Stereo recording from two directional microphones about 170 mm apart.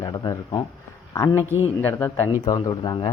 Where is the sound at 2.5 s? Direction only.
25° left (ahead or behind).